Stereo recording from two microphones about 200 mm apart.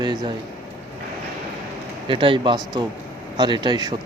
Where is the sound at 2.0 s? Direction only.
25° right (ahead or behind).